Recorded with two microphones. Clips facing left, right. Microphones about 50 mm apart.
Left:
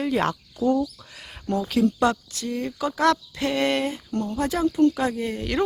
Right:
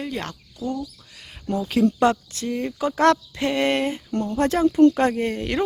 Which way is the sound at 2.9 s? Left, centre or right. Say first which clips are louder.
Right 3 dB; right.